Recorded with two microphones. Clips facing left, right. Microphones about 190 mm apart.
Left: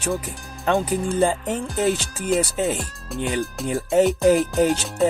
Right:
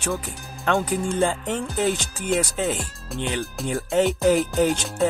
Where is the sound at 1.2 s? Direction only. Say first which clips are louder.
Left 2 dB; 5° left (ahead or behind).